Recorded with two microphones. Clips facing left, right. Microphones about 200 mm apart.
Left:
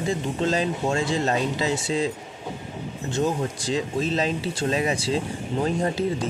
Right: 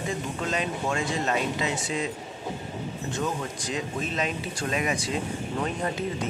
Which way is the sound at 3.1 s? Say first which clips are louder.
Left 7 dB; 30° left (ahead or behind).